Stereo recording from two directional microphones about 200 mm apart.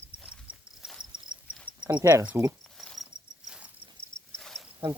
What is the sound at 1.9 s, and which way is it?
Speech, 15° right (ahead or behind).